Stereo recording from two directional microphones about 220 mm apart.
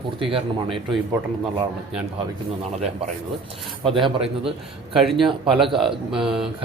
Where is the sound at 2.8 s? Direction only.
30° right (ahead or behind).